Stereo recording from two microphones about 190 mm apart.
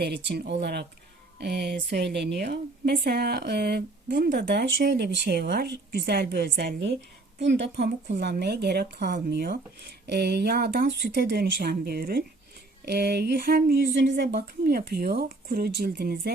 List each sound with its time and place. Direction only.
0.0 s a woman's voice: 60° right (ahead or behind)